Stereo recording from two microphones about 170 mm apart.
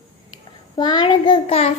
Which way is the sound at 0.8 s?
25° left (ahead or behind).